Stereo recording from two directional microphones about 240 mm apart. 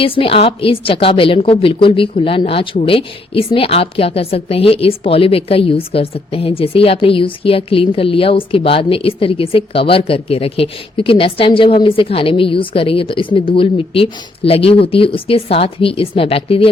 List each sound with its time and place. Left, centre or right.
0.0 s a woman's voice: left